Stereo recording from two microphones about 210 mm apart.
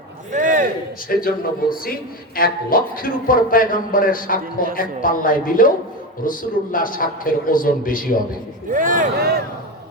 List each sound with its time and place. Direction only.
0.3 s a sound: 40° right (ahead or behind)
1.0 s a man's voice: 45° left (ahead or behind)
8.7 s speech: 40° right (ahead or behind)